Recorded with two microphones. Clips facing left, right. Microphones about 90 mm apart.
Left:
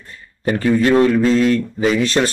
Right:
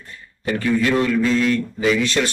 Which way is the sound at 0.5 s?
40° left (ahead or behind).